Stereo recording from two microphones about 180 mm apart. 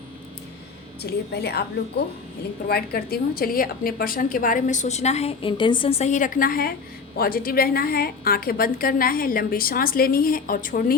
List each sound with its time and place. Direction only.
1.0 s a woman's voice: 65° left (ahead or behind)